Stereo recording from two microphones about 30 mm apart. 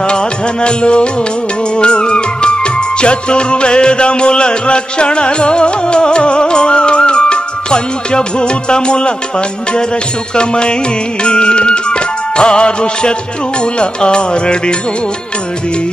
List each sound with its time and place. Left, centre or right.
0.0 s music: left
10.3 s music: left